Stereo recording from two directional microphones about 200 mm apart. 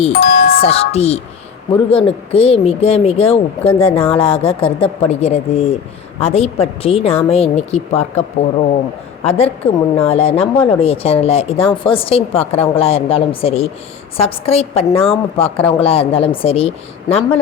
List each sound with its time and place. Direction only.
0.1 s doorbell: 50° left (ahead or behind)
0.6 s speech: 30° left (ahead or behind)
9.2 s speech: 30° left (ahead or behind)